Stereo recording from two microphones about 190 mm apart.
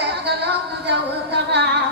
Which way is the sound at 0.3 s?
60° right (ahead or behind).